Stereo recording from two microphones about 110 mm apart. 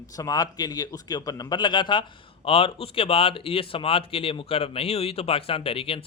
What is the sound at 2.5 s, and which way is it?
Speech, 55° left (ahead or behind).